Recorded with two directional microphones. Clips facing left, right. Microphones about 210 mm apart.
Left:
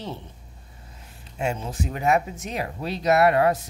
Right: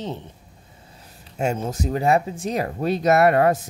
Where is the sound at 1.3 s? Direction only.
45° right (ahead or behind).